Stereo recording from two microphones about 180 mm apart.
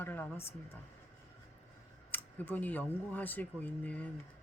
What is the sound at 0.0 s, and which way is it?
Speech, 10° left (ahead or behind).